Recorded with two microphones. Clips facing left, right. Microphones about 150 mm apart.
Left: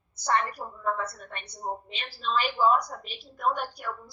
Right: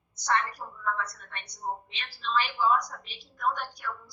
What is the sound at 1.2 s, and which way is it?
Speech, 50° left (ahead or behind).